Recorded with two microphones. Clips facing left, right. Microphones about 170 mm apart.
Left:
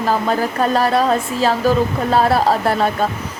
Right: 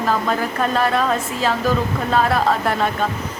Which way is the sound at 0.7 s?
35° left (ahead or behind).